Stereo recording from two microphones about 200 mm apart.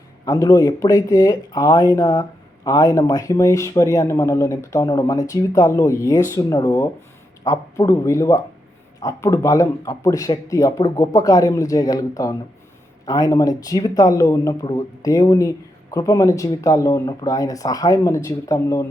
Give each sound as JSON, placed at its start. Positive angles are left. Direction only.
{"t": 0.3, "sound": "speech", "side_deg": 15}